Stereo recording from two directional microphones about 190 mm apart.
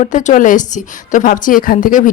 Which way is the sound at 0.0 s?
40° left (ahead or behind).